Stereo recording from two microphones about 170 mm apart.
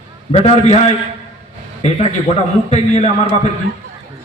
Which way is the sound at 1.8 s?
40° left (ahead or behind).